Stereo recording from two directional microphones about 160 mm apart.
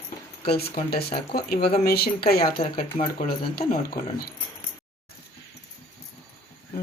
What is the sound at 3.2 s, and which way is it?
Speech, 70° left (ahead or behind).